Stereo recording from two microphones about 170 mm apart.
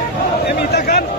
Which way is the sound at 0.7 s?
65° left (ahead or behind).